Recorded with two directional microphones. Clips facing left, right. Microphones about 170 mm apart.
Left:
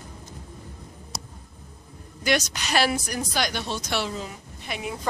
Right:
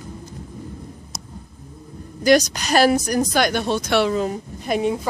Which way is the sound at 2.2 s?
40° right (ahead or behind).